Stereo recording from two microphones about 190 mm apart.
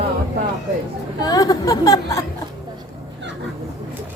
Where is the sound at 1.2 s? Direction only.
20° left (ahead or behind).